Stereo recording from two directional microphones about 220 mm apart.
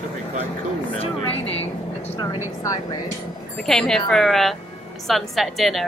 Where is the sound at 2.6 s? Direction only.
15° left (ahead or behind).